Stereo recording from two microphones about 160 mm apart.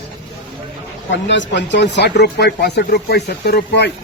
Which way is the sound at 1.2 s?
90° left.